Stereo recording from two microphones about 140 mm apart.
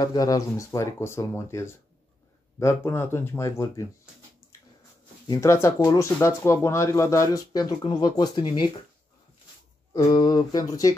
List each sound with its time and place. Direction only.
0.0 s speech: 25° left (ahead or behind)
5.3 s speech: 20° left (ahead or behind)
10.0 s speech: 30° left (ahead or behind)